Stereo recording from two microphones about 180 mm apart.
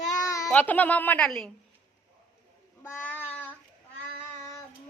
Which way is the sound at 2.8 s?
10° left (ahead or behind).